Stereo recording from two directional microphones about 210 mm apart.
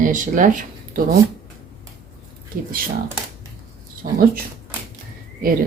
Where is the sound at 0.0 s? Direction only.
40° right (ahead or behind).